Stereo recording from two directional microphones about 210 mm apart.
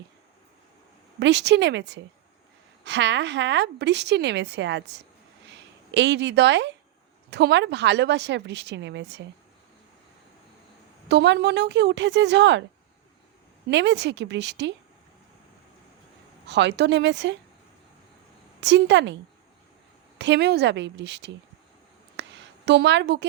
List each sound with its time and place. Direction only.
1.2 s a woman's voice: 55° right (ahead or behind)
11.1 s a woman's voice: 55° right (ahead or behind)
13.7 s a woman's voice: 55° right (ahead or behind)
16.5 s a woman's voice: 55° right (ahead or behind)
18.6 s a woman's voice: 55° right (ahead or behind)
22.1 s a sound: 55° right (ahead or behind)